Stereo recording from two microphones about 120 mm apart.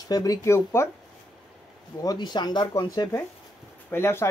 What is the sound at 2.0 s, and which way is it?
Speech, 40° left (ahead or behind).